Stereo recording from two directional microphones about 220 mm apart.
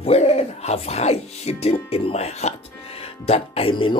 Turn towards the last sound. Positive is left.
turn(degrees=25)  # may be behind; listen again after turning